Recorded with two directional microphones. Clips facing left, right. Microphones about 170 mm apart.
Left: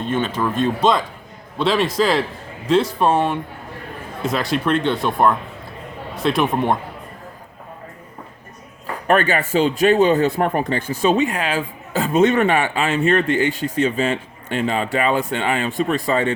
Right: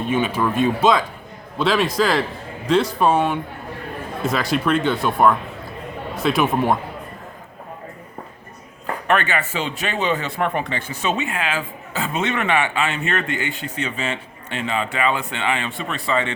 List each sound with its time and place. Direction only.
0.0 s speech: 10° right (ahead or behind)
9.0 s speech: 40° left (ahead or behind)